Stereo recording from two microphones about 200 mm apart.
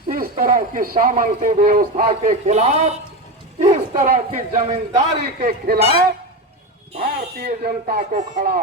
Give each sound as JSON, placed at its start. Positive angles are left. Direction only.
{"t": 0.1, "sound": "a man's voice", "side_deg": -45}
{"t": 5.5, "sound": "a man's voice", "side_deg": -50}
{"t": 7.0, "sound": "a man's voice", "side_deg": -50}